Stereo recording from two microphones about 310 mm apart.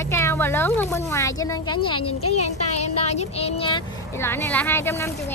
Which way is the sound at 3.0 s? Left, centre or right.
Left.